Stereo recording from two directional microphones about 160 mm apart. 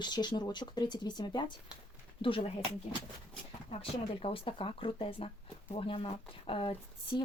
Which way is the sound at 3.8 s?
35° left (ahead or behind).